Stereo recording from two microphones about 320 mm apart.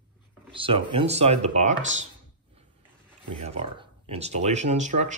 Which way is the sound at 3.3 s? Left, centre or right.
Centre.